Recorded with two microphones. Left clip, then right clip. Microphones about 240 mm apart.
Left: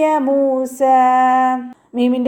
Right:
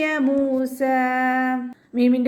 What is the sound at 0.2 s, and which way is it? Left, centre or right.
A woman's voice, left.